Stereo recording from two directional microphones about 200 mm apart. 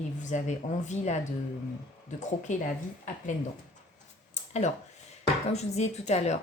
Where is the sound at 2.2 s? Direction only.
35° left (ahead or behind).